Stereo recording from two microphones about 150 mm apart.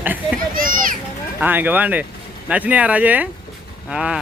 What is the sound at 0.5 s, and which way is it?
Speech, 70° right (ahead or behind).